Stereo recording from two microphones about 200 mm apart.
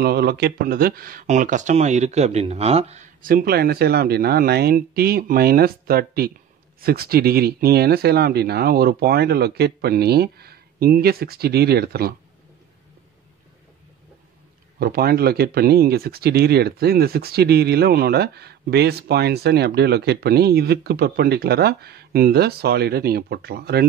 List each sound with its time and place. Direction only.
0.0 s speech: 55° right (ahead or behind)
14.8 s speech: 50° right (ahead or behind)